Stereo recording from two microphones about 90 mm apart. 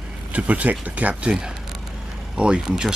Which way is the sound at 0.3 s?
15° right (ahead or behind).